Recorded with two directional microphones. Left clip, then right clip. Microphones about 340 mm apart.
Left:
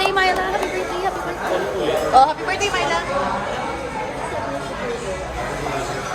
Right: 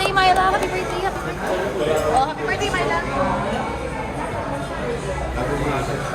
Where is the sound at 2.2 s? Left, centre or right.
Left.